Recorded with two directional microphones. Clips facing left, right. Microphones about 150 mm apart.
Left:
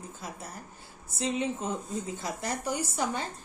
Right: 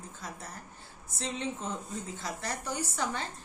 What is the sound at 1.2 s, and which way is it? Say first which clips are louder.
Speech: left 5 dB; 10° left (ahead or behind).